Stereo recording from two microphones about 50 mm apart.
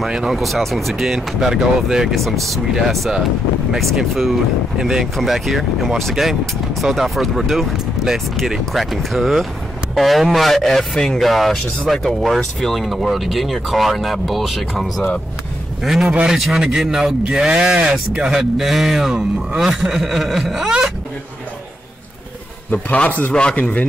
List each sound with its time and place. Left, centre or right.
0.0 s a man's voice: centre
2.1 s speech: centre
3.7 s a man's voice: centre
16.1 s speech: right
16.3 s a man's voice: centre
22.7 s a man's voice: left